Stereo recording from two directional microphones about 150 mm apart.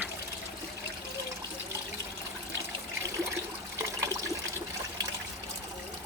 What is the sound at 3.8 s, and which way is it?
Water, 20° right (ahead or behind).